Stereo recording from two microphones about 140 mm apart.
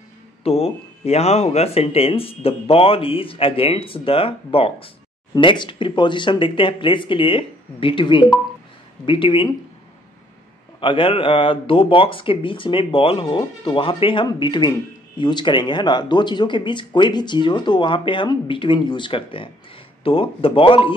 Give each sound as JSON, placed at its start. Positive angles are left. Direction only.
{"t": 0.4, "sound": "speech", "side_deg": 45}
{"t": 10.8, "sound": "speech", "side_deg": 35}